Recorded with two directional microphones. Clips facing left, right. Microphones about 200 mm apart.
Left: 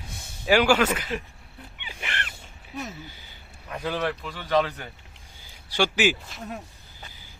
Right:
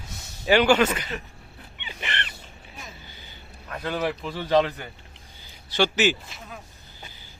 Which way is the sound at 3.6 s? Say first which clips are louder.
Even; 5° left (ahead or behind).